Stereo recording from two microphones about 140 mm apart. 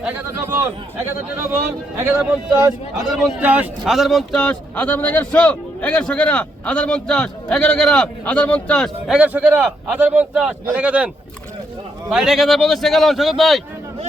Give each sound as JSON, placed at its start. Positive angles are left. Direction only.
{"t": 2.0, "sound": "a man's voice", "side_deg": -20}
{"t": 3.1, "sound": "a man's voice", "side_deg": -5}
{"t": 9.1, "sound": "a man's voice", "side_deg": -10}